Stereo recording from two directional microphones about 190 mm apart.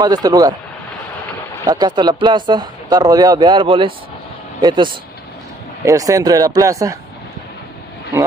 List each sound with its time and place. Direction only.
0.0 s speech: 20° right (ahead or behind)
1.6 s speech: 20° right (ahead or behind)